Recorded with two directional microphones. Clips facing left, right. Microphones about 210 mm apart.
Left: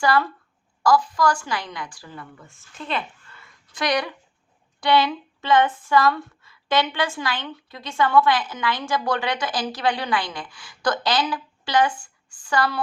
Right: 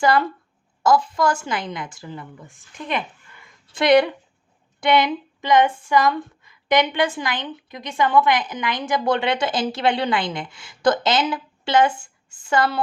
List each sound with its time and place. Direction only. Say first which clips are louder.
0.0 s speech: right 2 dB; 20° right (ahead or behind)
3.7 s speech: right 9 dB; 25° right (ahead or behind)